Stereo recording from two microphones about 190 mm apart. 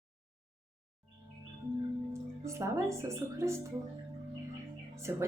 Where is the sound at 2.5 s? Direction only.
15° right (ahead or behind).